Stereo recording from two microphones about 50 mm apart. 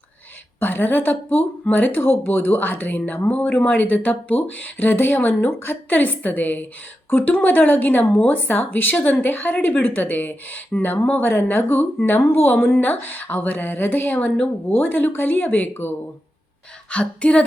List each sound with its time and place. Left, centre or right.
0.6 s speech: left
3.2 s speech: left
14.1 s a woman's voice: left
14.7 s speech: left
16.9 s a woman's voice: left